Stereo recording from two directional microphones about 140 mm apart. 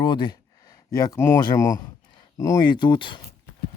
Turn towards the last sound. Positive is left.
turn(degrees=35)  # may be behind; listen again after turning